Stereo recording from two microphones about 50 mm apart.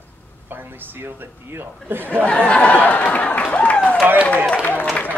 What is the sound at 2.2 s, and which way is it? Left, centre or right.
Speech, left.